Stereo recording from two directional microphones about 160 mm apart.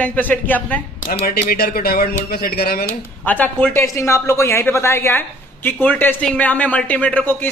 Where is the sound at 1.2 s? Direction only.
75° left (ahead or behind).